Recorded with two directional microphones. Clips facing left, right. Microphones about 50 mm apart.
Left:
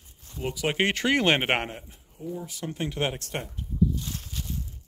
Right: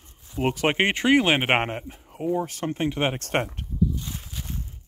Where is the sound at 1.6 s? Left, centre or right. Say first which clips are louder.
Right 6 dB; right.